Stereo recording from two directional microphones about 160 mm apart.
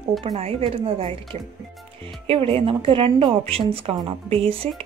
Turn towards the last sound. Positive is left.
turn(degrees=-35)  # may be behind; listen again after turning